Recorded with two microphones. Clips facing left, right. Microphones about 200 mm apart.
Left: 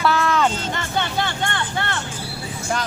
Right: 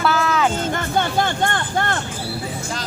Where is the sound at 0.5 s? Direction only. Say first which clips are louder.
Right 4 dB; 50° right (ahead or behind).